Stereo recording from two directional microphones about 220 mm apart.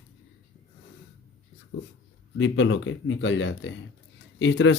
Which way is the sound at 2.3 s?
55° left (ahead or behind).